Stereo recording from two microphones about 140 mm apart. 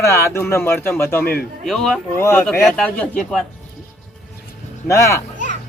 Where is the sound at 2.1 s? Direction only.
20° left (ahead or behind).